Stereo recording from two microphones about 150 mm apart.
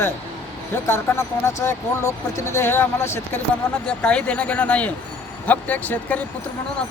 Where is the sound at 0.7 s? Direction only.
15° left (ahead or behind).